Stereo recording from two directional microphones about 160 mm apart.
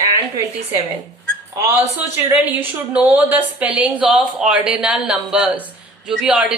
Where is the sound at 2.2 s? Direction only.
10° right (ahead or behind).